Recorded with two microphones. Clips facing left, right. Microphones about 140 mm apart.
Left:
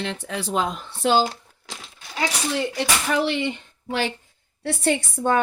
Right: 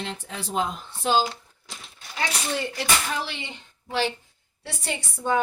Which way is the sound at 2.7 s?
75° left (ahead or behind).